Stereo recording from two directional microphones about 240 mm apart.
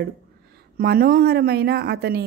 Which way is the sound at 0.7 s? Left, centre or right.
Right.